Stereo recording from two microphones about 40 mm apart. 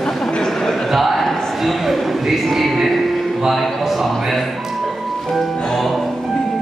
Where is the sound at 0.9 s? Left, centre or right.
Centre.